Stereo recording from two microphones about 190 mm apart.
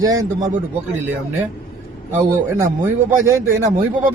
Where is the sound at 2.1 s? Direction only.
10° right (ahead or behind).